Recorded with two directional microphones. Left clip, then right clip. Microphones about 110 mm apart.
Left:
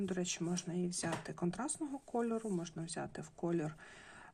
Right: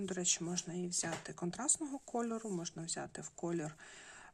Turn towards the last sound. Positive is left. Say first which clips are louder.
# left 2 dB
turn(degrees=-15)  # may be behind; listen again after turning